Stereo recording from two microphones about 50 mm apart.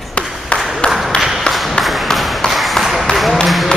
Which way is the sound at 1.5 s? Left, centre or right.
Centre.